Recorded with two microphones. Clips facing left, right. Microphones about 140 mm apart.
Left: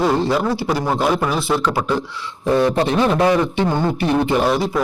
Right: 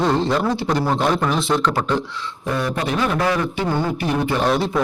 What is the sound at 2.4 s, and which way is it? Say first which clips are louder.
A man's voice: left 7 dB; 30° left (ahead or behind).